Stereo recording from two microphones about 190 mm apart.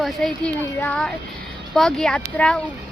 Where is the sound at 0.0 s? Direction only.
5° left (ahead or behind).